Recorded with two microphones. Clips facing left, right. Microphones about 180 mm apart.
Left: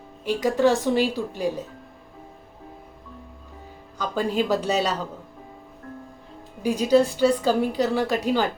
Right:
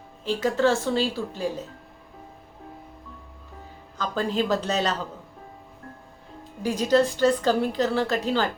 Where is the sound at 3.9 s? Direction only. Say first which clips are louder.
Left 2 dB; 10° left (ahead or behind).